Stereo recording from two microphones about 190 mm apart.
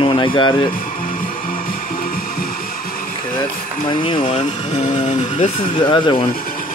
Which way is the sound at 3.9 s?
25° left (ahead or behind).